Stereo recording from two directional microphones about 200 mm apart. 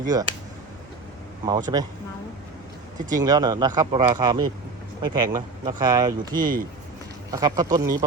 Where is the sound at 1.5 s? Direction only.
20° right (ahead or behind).